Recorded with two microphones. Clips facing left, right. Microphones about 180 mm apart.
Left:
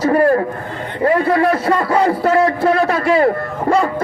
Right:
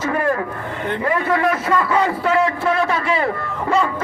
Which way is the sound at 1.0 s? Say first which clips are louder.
Left 6 dB; 35° left (ahead or behind).